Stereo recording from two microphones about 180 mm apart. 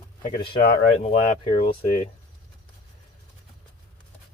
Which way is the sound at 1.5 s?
30° left (ahead or behind).